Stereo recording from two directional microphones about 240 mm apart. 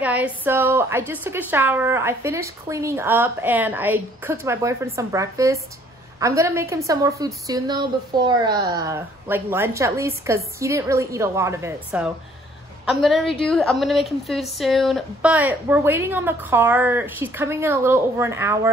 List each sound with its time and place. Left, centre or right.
0.0 s a woman's voice: centre